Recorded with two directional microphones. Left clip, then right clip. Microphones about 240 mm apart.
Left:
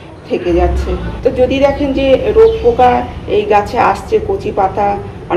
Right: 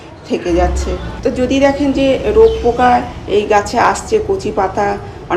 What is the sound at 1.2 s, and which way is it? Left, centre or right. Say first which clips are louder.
A woman's voice: left 2 dB; centre.